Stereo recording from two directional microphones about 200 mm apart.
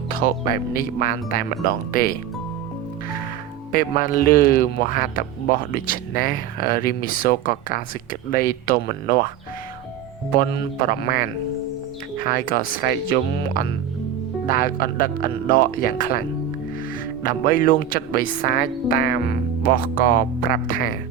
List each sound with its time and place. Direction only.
0.1 s speech: 45° left (ahead or behind)
3.7 s speech: 45° left (ahead or behind)
10.3 s speech: 50° left (ahead or behind)
17.2 s speech: 45° left (ahead or behind)